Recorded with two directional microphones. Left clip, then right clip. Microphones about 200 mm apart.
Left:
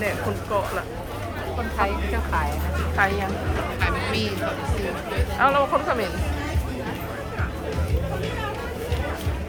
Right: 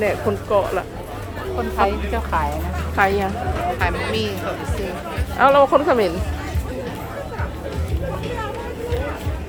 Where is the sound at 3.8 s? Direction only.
15° right (ahead or behind).